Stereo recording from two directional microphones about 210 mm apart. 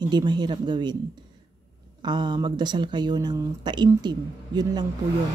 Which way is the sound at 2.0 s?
20° right (ahead or behind).